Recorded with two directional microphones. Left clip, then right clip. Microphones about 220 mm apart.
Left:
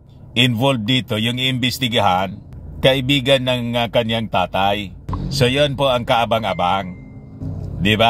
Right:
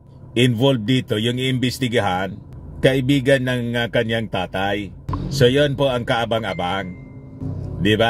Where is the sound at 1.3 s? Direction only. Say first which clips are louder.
Left 3 dB; 5° right (ahead or behind).